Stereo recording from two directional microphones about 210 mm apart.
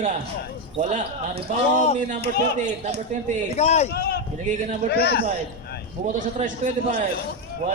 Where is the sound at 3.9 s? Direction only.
45° left (ahead or behind).